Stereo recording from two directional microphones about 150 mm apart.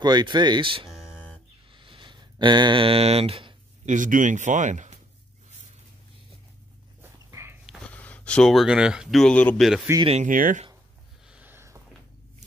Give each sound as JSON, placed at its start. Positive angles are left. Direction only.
{"t": 0.0, "sound": "speech", "side_deg": -30}
{"t": 0.8, "sound": "a sound", "side_deg": -5}
{"t": 1.7, "sound": "a sound", "side_deg": -35}
{"t": 3.8, "sound": "speech", "side_deg": -60}
{"t": 7.0, "sound": "dog", "side_deg": -15}
{"t": 7.9, "sound": "speech", "side_deg": 10}
{"t": 9.9, "sound": "speech", "side_deg": -20}
{"t": 10.2, "sound": "speech", "side_deg": -60}
{"t": 11.2, "sound": "a sound", "side_deg": -10}